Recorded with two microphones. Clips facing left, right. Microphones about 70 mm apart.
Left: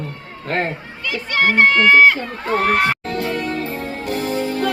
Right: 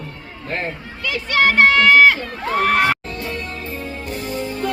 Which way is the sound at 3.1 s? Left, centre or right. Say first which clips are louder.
Left 6 dB; left.